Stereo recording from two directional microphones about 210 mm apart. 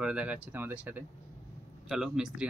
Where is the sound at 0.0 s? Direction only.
5° right (ahead or behind).